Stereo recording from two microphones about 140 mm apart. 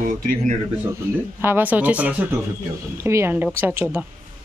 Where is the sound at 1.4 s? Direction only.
15° right (ahead or behind).